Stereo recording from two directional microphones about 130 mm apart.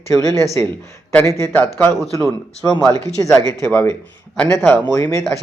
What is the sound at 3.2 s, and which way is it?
A man's voice, 25° left (ahead or behind).